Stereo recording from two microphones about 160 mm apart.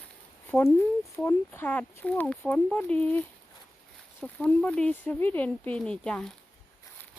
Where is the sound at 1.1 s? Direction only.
15° left (ahead or behind).